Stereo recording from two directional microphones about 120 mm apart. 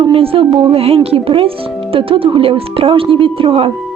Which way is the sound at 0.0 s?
50° right (ahead or behind).